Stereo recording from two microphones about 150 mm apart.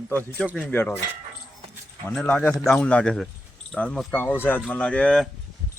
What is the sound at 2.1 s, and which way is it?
Speech, 5° left (ahead or behind).